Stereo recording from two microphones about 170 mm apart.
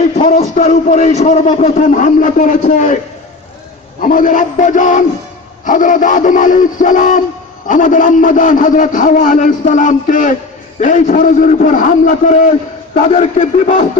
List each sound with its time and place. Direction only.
0.0 s a man's voice: 50° left (ahead or behind)
4.1 s a man's voice: 50° left (ahead or behind)